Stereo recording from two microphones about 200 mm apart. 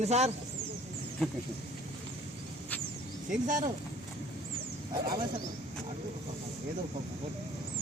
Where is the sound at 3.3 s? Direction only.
40° right (ahead or behind).